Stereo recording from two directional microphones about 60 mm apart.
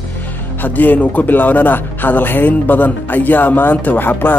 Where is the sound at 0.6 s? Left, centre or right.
Left.